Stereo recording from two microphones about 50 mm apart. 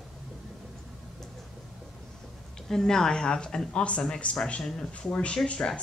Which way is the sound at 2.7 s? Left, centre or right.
Centre.